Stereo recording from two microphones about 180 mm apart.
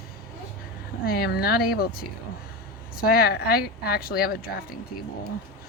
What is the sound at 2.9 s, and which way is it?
A woman's voice, 55° left (ahead or behind).